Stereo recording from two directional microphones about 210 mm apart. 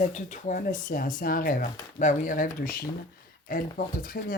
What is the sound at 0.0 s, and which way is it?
Speech, 35° left (ahead or behind).